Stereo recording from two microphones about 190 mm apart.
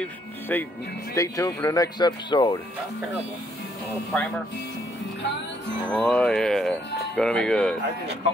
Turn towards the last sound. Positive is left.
turn(degrees=5)  # may be behind; listen again after turning